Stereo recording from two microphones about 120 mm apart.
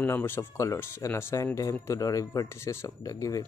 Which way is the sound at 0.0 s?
20° left (ahead or behind).